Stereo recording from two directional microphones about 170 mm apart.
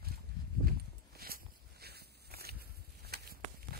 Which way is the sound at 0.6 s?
60° right (ahead or behind).